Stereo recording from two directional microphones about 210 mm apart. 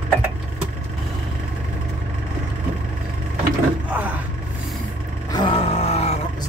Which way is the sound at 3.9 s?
5° right (ahead or behind).